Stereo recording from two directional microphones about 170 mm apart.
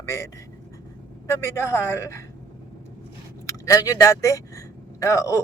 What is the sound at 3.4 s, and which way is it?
Speech, 20° left (ahead or behind).